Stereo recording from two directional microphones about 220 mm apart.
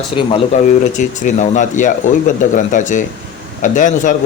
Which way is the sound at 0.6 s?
35° left (ahead or behind).